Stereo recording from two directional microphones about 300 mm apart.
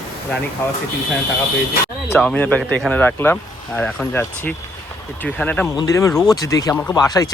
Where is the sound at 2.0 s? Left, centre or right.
Centre.